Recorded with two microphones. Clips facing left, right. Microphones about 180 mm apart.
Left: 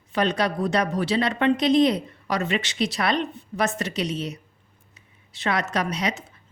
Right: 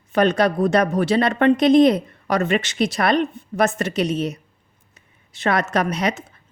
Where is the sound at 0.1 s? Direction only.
50° right (ahead or behind).